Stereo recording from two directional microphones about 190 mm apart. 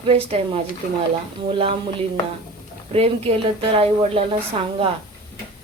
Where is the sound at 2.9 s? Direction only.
30° right (ahead or behind).